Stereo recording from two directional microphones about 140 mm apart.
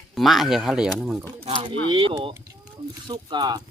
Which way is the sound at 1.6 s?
35° right (ahead or behind).